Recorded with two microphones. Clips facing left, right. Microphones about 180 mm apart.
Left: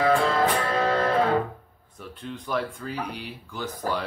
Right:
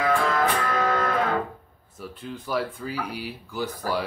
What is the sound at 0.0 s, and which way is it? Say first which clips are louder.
Music: left 2 dB; 30° left (ahead or behind).